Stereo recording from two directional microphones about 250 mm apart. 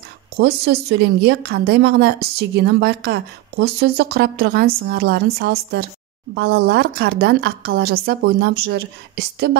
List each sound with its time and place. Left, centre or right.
0.4 s a woman's voice: right